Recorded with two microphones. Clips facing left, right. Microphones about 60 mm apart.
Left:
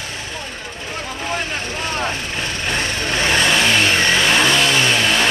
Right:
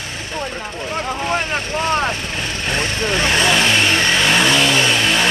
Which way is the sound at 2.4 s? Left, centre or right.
Centre.